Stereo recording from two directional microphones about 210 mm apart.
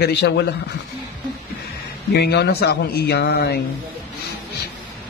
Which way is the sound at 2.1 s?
50° left (ahead or behind).